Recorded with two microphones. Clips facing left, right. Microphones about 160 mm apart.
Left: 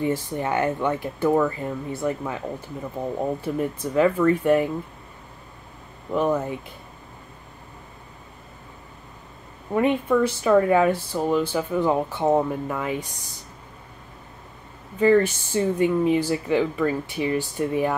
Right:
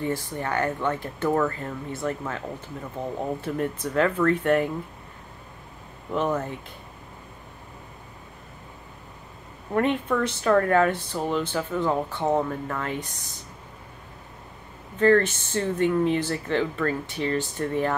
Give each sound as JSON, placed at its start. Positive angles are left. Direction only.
{"t": 0.0, "sound": "speech", "side_deg": 15}
{"t": 6.1, "sound": "speech", "side_deg": 10}
{"t": 9.7, "sound": "speech", "side_deg": 10}
{"t": 15.0, "sound": "speech", "side_deg": 10}